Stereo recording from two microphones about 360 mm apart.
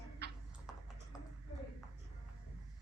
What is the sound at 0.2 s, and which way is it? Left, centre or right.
Horse, right.